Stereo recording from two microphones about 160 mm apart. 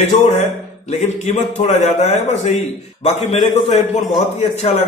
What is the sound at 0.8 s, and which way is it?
A man's voice, 45° left (ahead or behind).